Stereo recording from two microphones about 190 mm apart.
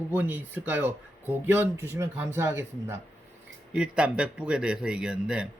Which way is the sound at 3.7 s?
5° right (ahead or behind).